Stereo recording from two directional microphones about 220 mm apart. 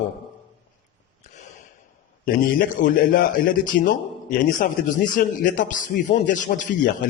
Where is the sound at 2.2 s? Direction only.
40° left (ahead or behind).